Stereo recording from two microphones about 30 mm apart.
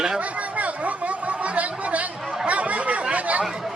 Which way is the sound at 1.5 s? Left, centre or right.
Right.